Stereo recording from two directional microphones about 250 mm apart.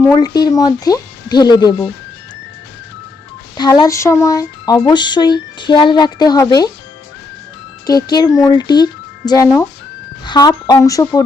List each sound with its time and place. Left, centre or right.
0.0 s speech: centre
3.6 s speech: centre
7.9 s speech: centre